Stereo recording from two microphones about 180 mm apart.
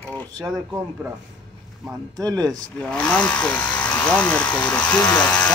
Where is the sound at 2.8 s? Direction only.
5° left (ahead or behind).